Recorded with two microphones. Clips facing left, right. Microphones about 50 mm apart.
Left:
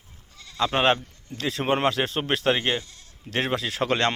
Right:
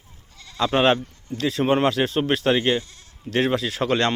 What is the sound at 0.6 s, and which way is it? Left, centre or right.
Speech, centre.